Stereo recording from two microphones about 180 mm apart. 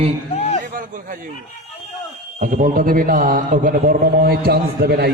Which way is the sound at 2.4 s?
50° right (ahead or behind).